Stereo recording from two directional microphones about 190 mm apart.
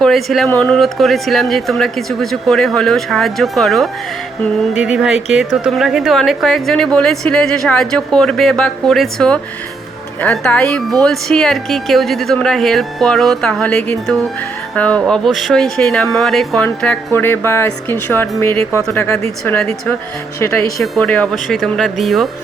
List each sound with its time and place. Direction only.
0.0 s a woman's voice: centre (ahead or behind)
20.4 s speech: 15° left (ahead or behind)
20.8 s a woman's voice: centre (ahead or behind)